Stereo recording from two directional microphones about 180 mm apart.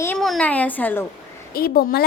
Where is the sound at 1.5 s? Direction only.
55° left (ahead or behind).